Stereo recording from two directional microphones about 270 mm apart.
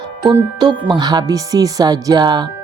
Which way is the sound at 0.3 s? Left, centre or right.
Centre.